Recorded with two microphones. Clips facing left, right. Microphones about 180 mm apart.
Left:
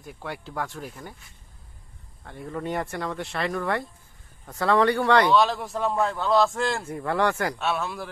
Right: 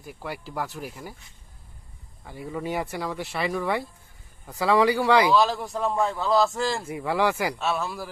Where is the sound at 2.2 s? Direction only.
5° right (ahead or behind).